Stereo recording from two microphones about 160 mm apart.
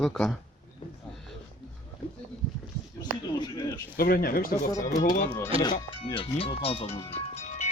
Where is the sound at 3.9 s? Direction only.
70° left (ahead or behind).